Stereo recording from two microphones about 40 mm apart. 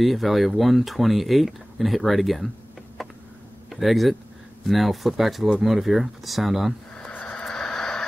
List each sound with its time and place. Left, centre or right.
0.0 s speech: centre
3.7 s speech: centre
7.1 s vehicle: left
7.4 s a sound: centre